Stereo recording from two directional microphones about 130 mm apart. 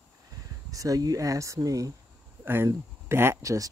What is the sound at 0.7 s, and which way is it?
Speech, 25° right (ahead or behind).